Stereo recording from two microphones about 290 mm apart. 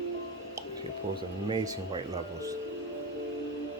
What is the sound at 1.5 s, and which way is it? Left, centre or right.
Speech, centre.